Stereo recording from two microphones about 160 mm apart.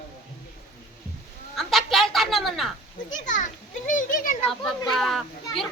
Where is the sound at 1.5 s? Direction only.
Centre (ahead or behind).